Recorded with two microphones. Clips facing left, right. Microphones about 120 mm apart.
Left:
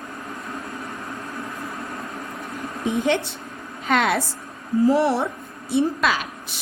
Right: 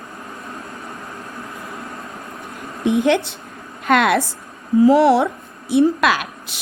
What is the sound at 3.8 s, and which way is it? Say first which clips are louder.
Speech: right 5 dB; 65° right (ahead or behind).